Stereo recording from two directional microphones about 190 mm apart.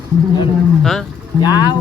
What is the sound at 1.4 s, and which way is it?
Speech, 20° left (ahead or behind).